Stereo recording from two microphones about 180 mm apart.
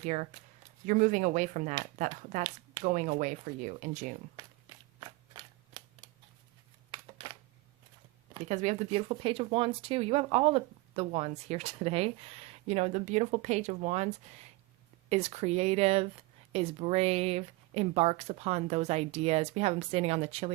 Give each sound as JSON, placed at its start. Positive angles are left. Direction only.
{"t": 0.0, "sound": "speech", "side_deg": -45}
{"t": 2.8, "sound": "speech", "side_deg": -45}
{"t": 4.4, "sound": "walk", "side_deg": -20}
{"t": 4.9, "sound": "a sound", "side_deg": -25}
{"t": 8.3, "sound": "speech", "side_deg": -40}
{"t": 15.1, "sound": "speech", "side_deg": -35}